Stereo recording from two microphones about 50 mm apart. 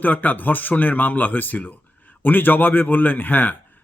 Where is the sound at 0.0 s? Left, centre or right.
Left.